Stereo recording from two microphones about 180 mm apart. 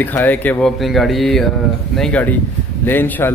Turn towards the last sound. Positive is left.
turn(degrees=10)  # may be behind; listen again after turning